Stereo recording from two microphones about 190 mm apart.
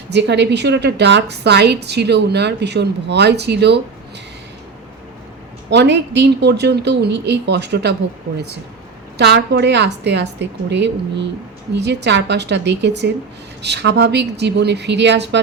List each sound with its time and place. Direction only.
0.1 s a woman's voice: 65° right (ahead or behind)
5.7 s a woman's voice: 65° right (ahead or behind)
9.1 s a woman's voice: 60° right (ahead or behind)